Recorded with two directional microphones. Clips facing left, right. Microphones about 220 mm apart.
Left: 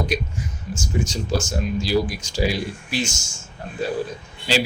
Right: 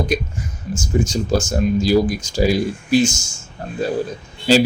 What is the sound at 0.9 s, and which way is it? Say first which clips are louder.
Speech: right 6 dB; 45° right (ahead or behind).